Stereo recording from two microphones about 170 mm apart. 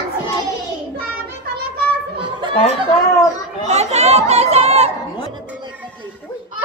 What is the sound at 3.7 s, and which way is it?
Chatter, 40° right (ahead or behind).